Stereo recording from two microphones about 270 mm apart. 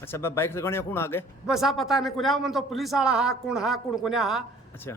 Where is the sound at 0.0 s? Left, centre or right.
Centre.